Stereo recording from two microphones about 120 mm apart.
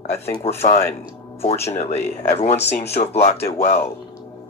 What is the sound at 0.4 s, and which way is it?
Speech, 60° left (ahead or behind).